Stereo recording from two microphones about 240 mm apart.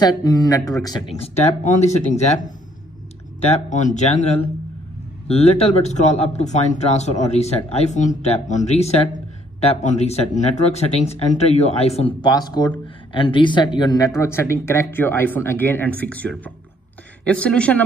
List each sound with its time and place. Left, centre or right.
0.0 s speech: centre